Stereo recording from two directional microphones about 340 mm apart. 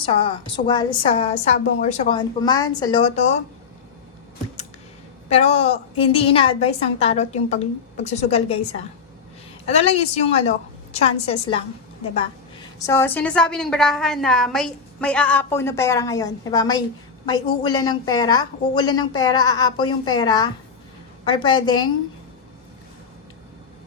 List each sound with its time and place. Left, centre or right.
0.0 s a woman's voice: centre
5.3 s a woman's voice: centre
9.6 s a woman's voice: centre